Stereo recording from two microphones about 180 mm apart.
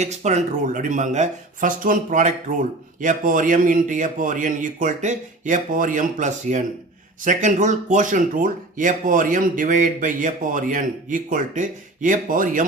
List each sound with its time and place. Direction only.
0.0 s speech: 40° right (ahead or behind)